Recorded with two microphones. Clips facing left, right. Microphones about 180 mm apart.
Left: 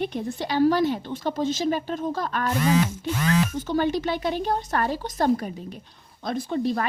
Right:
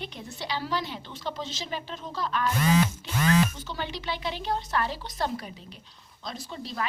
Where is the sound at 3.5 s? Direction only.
50° left (ahead or behind).